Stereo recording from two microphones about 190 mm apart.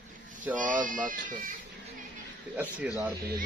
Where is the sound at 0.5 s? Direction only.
45° right (ahead or behind).